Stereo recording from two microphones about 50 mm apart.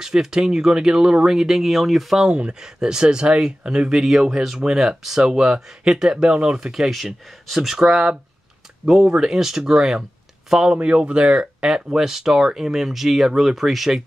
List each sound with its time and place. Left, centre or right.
0.0 s speech: centre
2.2 s speech: right
11.7 s speech: centre